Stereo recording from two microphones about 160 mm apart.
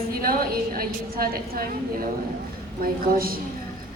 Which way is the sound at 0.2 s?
65° right (ahead or behind).